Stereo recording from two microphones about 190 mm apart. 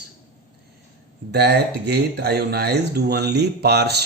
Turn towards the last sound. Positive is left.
turn(degrees=-60)  # may be behind; listen again after turning